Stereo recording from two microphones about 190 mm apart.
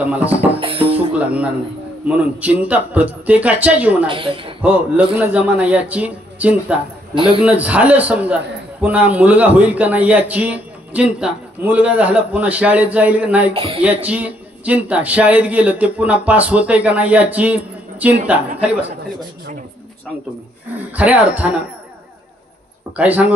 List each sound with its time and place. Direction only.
0.0 s a man's voice: 10° right (ahead or behind)
0.6 s music: 30° right (ahead or behind)
0.9 s music: 5° right (ahead or behind)
2.0 s a man's voice: 10° right (ahead or behind)
4.1 s speech: 25° right (ahead or behind)
4.6 s a man's voice: 10° right (ahead or behind)
13.5 s speech: 30° right (ahead or behind)
13.8 s a man's voice: 10° right (ahead or behind)
20.9 s a man's voice: 10° right (ahead or behind)
22.9 s a man's voice: 10° right (ahead or behind)